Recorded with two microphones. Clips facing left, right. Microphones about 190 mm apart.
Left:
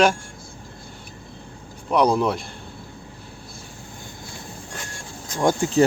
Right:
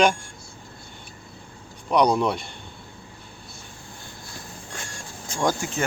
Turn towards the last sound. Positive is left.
turn(degrees=30)  # may be behind; listen again after turning